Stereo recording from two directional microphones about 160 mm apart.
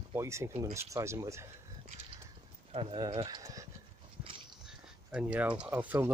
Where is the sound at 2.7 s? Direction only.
35° right (ahead or behind).